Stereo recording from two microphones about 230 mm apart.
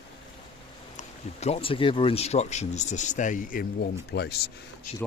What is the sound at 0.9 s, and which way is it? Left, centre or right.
Speech, left.